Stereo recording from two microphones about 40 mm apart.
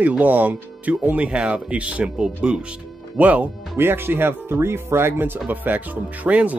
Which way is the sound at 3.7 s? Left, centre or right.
Right.